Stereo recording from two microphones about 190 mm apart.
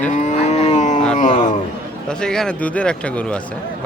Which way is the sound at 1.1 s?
40° left (ahead or behind).